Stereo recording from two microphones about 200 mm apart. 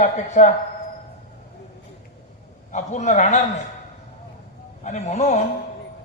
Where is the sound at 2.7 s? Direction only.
35° left (ahead or behind).